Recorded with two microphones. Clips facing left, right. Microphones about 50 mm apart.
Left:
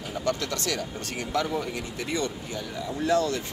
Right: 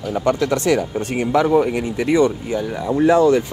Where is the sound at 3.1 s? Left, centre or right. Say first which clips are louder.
Right 10 dB; right.